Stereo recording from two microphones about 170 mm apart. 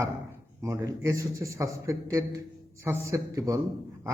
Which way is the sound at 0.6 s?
20° right (ahead or behind).